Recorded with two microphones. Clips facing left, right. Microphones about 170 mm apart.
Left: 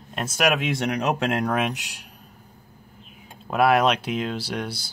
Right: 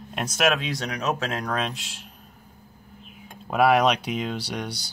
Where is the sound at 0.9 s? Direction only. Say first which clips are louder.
Left 3 dB; 65° left (ahead or behind).